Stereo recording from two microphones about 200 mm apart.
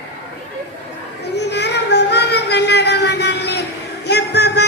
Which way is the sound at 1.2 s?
55° left (ahead or behind).